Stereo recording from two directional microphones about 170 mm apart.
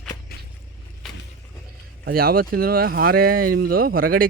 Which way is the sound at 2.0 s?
65° right (ahead or behind).